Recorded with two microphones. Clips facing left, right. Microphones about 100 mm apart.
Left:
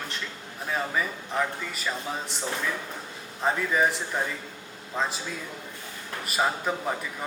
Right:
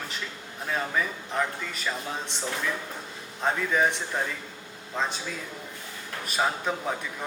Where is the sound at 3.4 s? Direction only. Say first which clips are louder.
Even; 5° left (ahead or behind).